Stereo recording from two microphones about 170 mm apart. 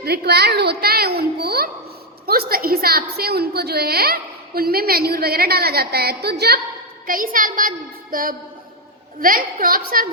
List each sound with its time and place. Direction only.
0.0 s a woman's voice: 70° right (ahead or behind)
7.1 s a woman's voice: 55° right (ahead or behind)